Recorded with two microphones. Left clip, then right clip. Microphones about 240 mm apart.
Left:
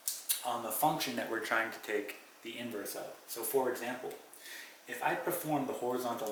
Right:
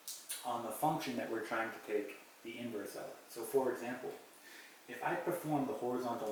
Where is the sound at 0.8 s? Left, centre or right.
Centre.